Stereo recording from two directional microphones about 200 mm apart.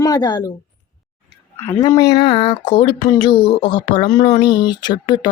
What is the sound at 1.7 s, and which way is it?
A woman's voice, 15° left (ahead or behind).